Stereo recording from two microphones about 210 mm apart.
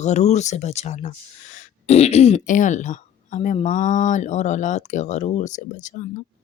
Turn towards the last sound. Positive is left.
turn(degrees=35)  # may be behind; listen again after turning